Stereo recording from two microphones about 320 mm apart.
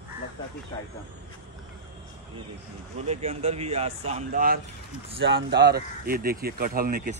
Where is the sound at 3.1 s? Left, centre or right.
Centre.